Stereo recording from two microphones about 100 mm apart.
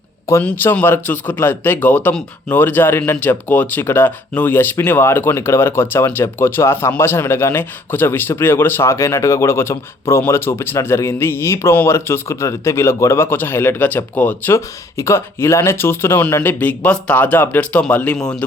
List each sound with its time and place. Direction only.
0.4 s speech: 20° left (ahead or behind)